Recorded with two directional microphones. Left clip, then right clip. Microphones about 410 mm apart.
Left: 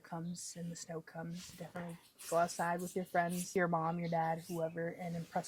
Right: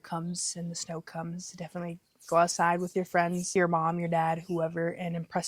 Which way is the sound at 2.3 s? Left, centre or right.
Right.